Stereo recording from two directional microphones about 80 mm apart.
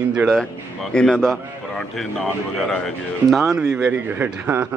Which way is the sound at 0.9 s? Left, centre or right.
Centre.